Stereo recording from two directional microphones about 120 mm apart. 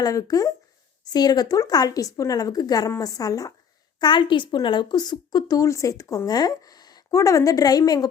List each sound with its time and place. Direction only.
0.0 s a woman's voice: 30° left (ahead or behind)